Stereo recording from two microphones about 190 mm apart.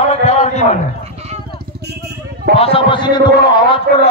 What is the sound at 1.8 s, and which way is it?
Vehicle, 60° right (ahead or behind).